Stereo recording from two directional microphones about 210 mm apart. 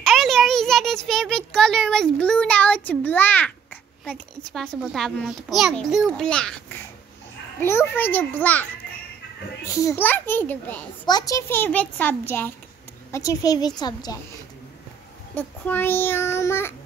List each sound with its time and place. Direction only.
0.0 s a sound: centre (ahead or behind)
4.5 s a child's voice: centre (ahead or behind)
9.7 s a child's voice: 15° left (ahead or behind)
15.3 s a child's voice: 10° left (ahead or behind)